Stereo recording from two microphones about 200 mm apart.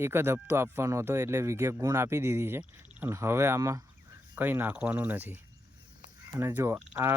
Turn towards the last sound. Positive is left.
turn(degrees=-10)  # may be behind; listen again after turning